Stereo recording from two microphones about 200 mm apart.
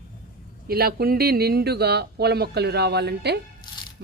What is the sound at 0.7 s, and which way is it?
Speech, 50° right (ahead or behind).